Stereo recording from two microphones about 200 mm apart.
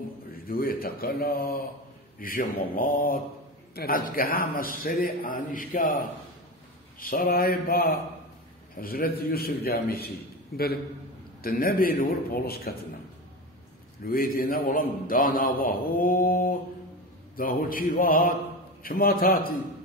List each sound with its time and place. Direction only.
0.5 s a man's voice: 50° left (ahead or behind)
11.4 s a man's voice: 45° left (ahead or behind)
14.0 s a man's voice: 45° left (ahead or behind)